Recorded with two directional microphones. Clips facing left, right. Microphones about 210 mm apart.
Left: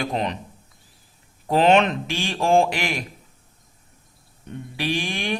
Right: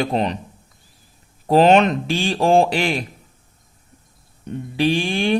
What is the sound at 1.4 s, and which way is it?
Speech, 35° right (ahead or behind).